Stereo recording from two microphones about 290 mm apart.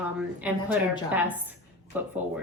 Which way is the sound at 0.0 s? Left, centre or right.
Centre.